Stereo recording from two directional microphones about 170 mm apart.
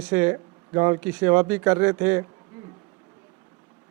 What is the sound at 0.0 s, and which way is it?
Speech, 10° right (ahead or behind).